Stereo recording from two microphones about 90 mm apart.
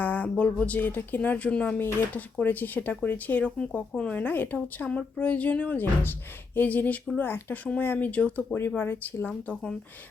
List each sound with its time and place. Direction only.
0.0 s a woman's voice: 20° left (ahead or behind)